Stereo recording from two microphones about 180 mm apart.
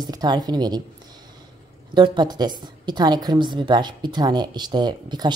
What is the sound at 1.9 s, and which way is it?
A woman's voice, 25° right (ahead or behind).